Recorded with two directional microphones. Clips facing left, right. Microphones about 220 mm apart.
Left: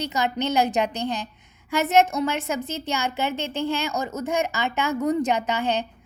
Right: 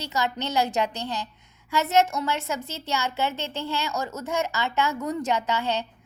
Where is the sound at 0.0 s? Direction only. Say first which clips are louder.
Left 3 dB; 15° left (ahead or behind).